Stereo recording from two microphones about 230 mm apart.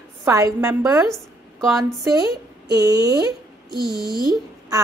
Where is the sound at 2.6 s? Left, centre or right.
Centre.